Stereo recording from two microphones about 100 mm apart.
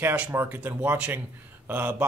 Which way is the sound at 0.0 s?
15° right (ahead or behind).